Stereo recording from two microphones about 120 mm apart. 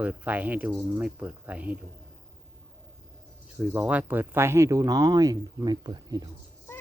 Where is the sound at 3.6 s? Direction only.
10° right (ahead or behind); by 6.2 s 35° right (ahead or behind).